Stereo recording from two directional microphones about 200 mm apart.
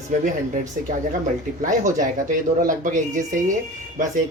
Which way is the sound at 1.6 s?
40° right (ahead or behind).